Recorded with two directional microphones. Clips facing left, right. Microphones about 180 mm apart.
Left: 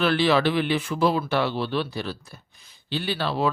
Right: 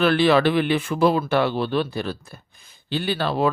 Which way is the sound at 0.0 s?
55° right (ahead or behind).